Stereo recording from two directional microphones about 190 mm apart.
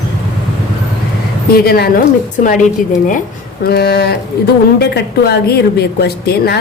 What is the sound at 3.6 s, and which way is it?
A woman's voice, 55° left (ahead or behind).